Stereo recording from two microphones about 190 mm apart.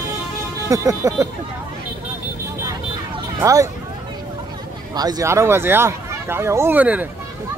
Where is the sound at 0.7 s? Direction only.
15° right (ahead or behind).